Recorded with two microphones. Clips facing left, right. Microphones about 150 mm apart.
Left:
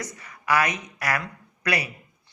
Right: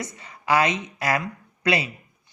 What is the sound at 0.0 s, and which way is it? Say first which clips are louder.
A woman's voice: right 1 dB; 25° right (ahead or behind).